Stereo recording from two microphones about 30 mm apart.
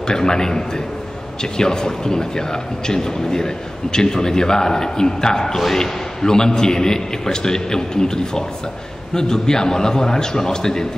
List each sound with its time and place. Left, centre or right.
0.0 s a man's voice: left